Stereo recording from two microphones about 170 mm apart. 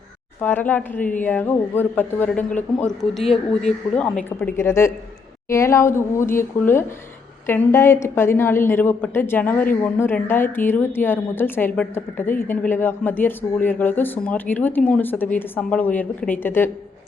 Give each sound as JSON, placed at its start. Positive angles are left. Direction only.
{"t": 0.4, "sound": "a woman's voice", "side_deg": 10}